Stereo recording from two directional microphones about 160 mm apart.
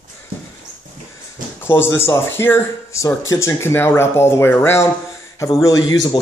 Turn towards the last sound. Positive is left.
turn(degrees=25)  # may be behind; listen again after turning